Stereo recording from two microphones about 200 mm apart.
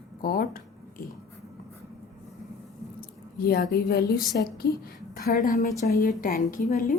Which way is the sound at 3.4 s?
50° left (ahead or behind).